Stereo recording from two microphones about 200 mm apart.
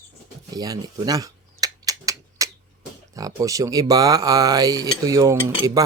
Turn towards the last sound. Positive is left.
turn(degrees=-15)  # may be behind; listen again after turning